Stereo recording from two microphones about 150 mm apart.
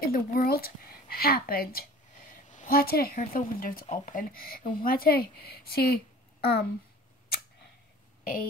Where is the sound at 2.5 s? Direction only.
75° left (ahead or behind).